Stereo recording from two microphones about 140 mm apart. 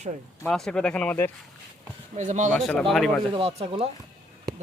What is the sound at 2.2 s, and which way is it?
Speech, 60° right (ahead or behind).